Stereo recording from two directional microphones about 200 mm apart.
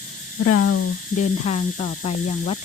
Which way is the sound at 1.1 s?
35° left (ahead or behind).